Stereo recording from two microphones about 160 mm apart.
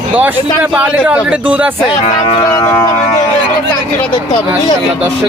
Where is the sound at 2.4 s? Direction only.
20° left (ahead or behind).